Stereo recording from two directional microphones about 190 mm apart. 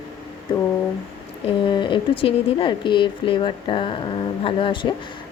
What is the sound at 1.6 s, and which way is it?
A woman's voice, 25° left (ahead or behind).